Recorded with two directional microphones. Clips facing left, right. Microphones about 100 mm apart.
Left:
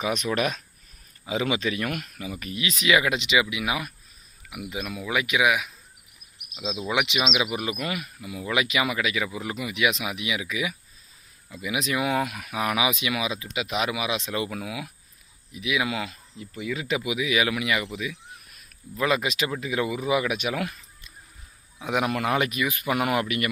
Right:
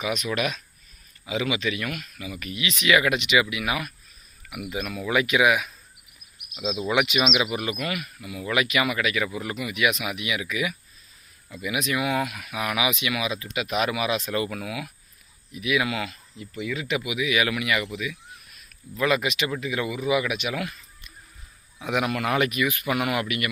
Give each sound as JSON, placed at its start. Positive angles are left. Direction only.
{"t": 0.0, "sound": "speech", "side_deg": 35}
{"t": 7.8, "sound": "speech", "side_deg": 25}
{"t": 21.8, "sound": "speech", "side_deg": 25}